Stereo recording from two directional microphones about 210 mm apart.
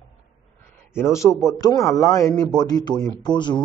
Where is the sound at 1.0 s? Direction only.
15° left (ahead or behind).